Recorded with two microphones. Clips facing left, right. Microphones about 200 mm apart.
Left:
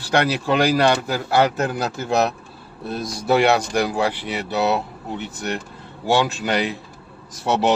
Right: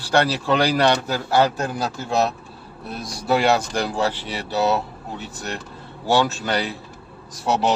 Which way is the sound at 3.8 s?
15° left (ahead or behind).